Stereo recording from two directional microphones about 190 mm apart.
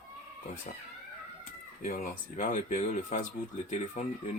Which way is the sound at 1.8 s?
45° left (ahead or behind).